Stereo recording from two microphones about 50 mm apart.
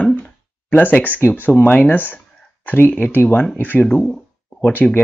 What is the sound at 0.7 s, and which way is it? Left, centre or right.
Speech, left.